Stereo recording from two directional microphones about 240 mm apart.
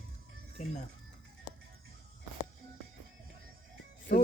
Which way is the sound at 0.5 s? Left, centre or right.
Left.